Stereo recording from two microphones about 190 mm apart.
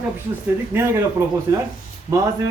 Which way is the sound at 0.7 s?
15° right (ahead or behind).